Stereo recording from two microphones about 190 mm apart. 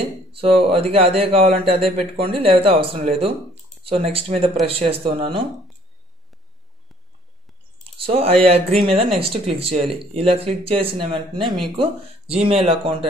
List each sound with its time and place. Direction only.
0.0 s speech: 30° right (ahead or behind)
8.0 s speech: 30° right (ahead or behind)
11.4 s speech: centre (ahead or behind)
11.7 s speech: 30° right (ahead or behind)